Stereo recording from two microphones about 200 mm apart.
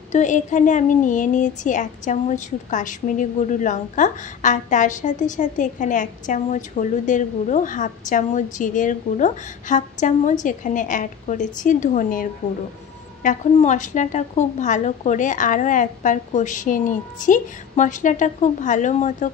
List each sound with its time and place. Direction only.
0.1 s a woman's voice: 40° left (ahead or behind)